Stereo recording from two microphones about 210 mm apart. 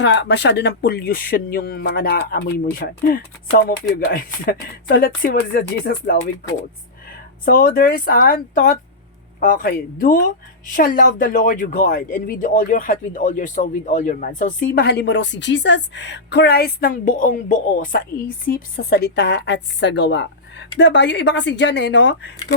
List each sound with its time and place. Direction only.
0.0 s speech: 55° left (ahead or behind)